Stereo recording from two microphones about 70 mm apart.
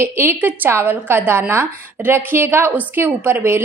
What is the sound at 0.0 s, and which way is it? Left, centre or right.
Speech, right.